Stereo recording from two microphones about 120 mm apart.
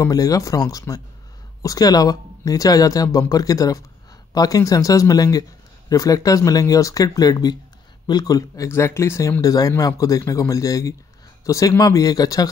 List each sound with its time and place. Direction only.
0.0 s speech: 30° left (ahead or behind)